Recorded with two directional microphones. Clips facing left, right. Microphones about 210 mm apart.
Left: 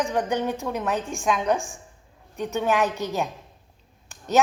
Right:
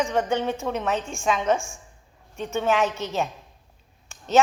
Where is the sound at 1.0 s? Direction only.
15° left (ahead or behind).